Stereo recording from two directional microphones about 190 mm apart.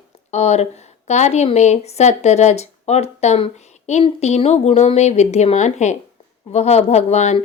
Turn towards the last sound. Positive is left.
turn(degrees=35)  # may be behind; listen again after turning